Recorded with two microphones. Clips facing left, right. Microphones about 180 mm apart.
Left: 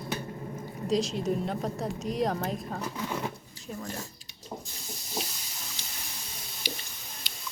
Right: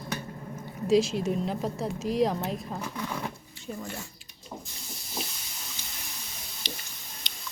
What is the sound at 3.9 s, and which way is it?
Speech, 40° left (ahead or behind).